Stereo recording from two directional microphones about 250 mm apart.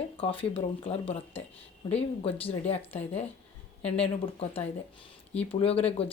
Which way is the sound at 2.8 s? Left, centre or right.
Centre.